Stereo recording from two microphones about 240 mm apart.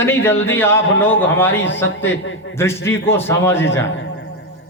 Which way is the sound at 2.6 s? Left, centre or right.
Centre.